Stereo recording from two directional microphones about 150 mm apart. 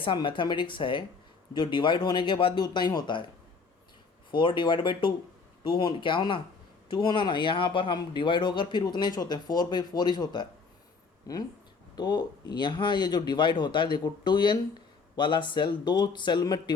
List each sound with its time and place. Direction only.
0.0 s speech: 35° left (ahead or behind)
4.3 s speech: 30° left (ahead or behind)